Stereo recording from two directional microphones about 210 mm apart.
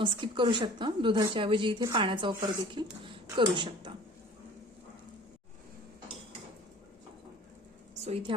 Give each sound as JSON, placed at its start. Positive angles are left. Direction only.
{"t": 0.0, "sound": "a woman's voice", "side_deg": -25}
{"t": 8.0, "sound": "a woman's voice", "side_deg": -25}